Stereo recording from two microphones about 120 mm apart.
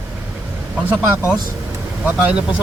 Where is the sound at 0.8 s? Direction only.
10° right (ahead or behind).